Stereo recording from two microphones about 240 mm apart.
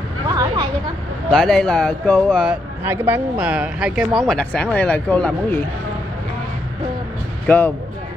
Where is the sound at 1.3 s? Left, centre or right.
Centre.